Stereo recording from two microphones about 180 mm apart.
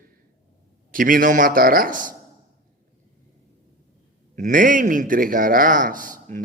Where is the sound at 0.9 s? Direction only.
50° right (ahead or behind).